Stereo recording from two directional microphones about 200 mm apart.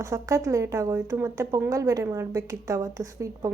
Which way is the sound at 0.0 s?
15° right (ahead or behind).